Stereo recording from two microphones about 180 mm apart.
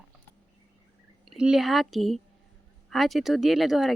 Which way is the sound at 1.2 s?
Centre (ahead or behind).